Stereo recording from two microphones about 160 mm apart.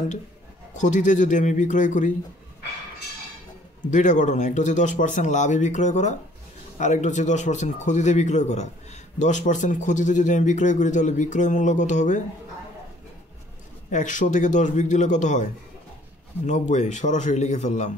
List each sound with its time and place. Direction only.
0.7 s speech: 50° left (ahead or behind)
3.9 s speech: 50° left (ahead or behind)
13.8 s speech: 50° left (ahead or behind)